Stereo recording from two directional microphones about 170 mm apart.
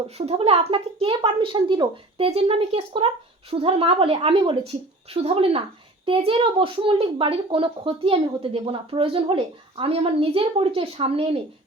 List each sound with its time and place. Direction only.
0.2 s a woman's voice: 35° right (ahead or behind)